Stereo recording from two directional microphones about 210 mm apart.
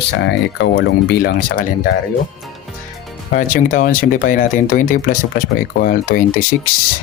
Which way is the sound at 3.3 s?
40° left (ahead or behind).